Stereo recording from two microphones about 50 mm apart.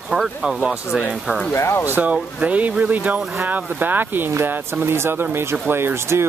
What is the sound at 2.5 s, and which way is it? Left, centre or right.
Speech, right.